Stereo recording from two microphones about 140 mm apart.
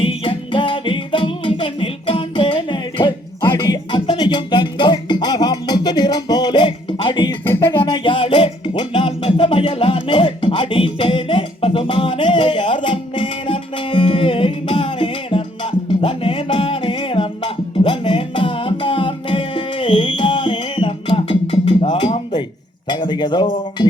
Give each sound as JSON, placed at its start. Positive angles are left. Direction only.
{"t": 0.0, "sound": "music", "side_deg": 40}
{"t": 7.4, "sound": "music", "side_deg": 15}
{"t": 7.7, "sound": "music", "side_deg": 35}
{"t": 22.9, "sound": "a sound", "side_deg": 30}